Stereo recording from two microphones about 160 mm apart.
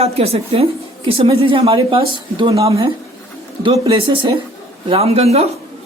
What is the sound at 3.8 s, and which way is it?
Speech, 35° right (ahead or behind).